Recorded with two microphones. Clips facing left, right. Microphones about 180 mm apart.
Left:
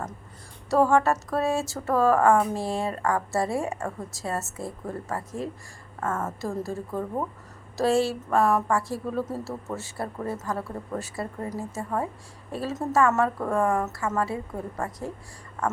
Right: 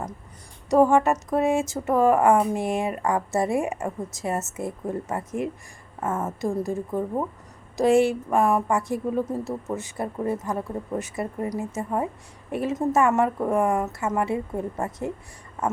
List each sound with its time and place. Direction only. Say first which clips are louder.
0.7 s speech: right 3 dB; 15° right (ahead or behind)